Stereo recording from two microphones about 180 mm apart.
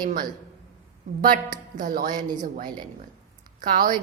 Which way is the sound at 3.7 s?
50° right (ahead or behind).